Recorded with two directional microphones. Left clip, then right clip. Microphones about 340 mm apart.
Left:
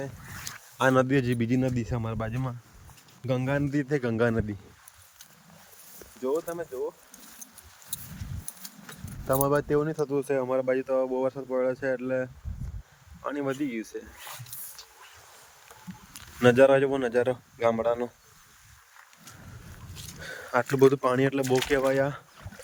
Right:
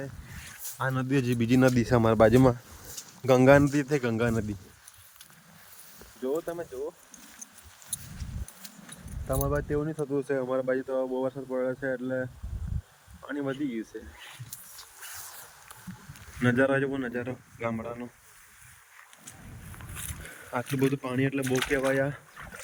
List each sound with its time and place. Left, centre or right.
0.9 s speech: centre
3.2 s speech: centre
6.2 s speech: centre
7.9 s horse: centre
8.6 s speech: centre
13.3 s speech: centre
16.4 s speech: centre
20.5 s speech: centre